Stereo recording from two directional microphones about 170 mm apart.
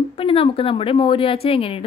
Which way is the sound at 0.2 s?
30° left (ahead or behind).